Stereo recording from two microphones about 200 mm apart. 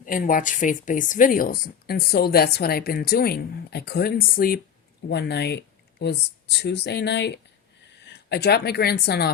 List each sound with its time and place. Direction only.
0.0 s speech: 45° left (ahead or behind)